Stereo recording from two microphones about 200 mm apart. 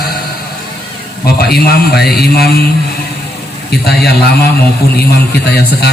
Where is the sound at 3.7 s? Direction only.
55° left (ahead or behind).